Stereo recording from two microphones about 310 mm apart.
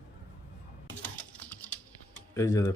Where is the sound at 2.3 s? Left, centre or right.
Centre.